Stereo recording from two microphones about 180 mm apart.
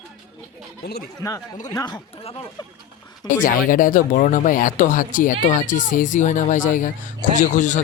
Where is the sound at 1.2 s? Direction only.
15° left (ahead or behind).